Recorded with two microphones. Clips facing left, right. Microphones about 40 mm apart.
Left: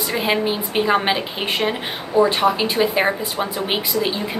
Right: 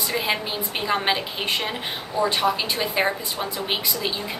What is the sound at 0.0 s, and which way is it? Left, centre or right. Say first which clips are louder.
A woman's voice: left 5 dB; centre.